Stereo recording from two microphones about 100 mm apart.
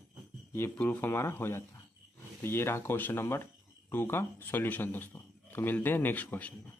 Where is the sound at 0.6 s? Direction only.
20° left (ahead or behind).